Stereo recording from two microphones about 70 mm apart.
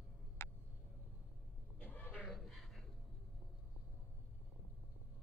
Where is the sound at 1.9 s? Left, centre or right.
Left.